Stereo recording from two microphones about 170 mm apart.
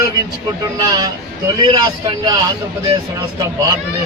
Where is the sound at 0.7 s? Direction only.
25° right (ahead or behind).